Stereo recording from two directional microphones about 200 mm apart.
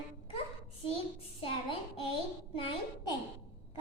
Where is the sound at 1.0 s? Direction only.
25° left (ahead or behind).